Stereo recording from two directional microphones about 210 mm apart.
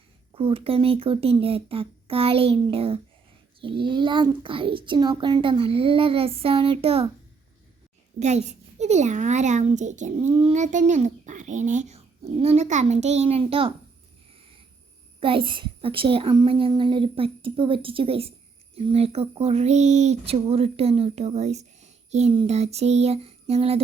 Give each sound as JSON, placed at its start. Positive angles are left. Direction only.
{"t": 0.3, "sound": "speech", "side_deg": -25}
{"t": 8.8, "sound": "a child's voice", "side_deg": -35}
{"t": 15.2, "sound": "speech", "side_deg": -25}